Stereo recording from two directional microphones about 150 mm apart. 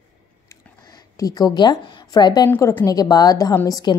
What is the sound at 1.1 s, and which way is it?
A woman's voice, 25° left (ahead or behind).